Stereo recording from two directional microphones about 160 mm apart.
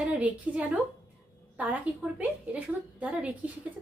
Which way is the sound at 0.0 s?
5° right (ahead or behind).